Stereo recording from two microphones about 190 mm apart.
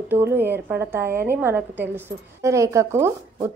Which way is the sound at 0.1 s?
10° right (ahead or behind).